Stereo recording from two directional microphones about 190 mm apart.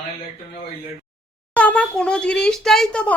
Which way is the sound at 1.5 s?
10° left (ahead or behind).